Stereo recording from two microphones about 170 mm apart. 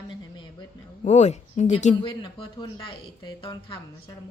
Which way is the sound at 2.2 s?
25° left (ahead or behind).